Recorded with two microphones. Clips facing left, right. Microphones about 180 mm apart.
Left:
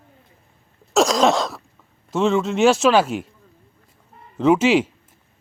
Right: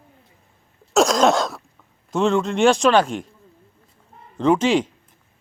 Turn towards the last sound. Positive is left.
turn(degrees=5)  # may be behind; listen again after turning